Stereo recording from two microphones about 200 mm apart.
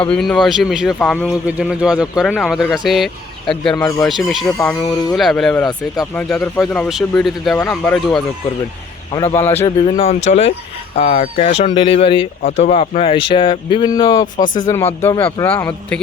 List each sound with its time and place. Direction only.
0.1 s speech: centre (ahead or behind)
9.3 s speech: 10° left (ahead or behind)
9.6 s speech: 25° left (ahead or behind)
14.3 s speech: 40° left (ahead or behind)
15.0 s speech: 15° left (ahead or behind)